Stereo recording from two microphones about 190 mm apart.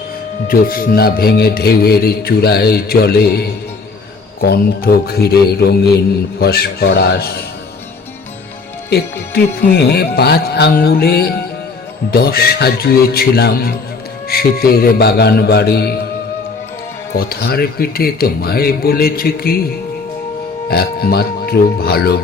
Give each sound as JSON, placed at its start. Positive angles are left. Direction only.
{"t": 0.4, "sound": "speech", "side_deg": 50}
{"t": 9.6, "sound": "speech", "side_deg": 55}
{"t": 17.2, "sound": "speech", "side_deg": 55}
{"t": 20.7, "sound": "speech", "side_deg": 55}